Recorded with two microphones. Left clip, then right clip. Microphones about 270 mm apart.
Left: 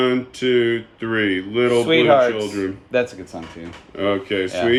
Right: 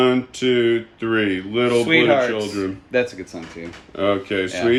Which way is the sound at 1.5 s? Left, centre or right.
Centre.